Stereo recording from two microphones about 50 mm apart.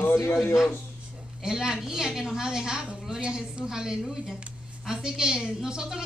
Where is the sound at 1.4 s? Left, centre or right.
Centre.